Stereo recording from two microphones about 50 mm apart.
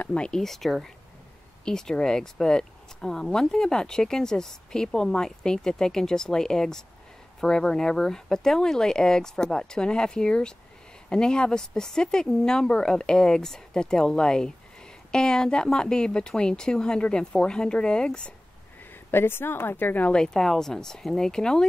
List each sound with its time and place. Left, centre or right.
0.0 s speech: left
0.4 s speech: centre
19.0 s a woman's voice: left
20.1 s speech: centre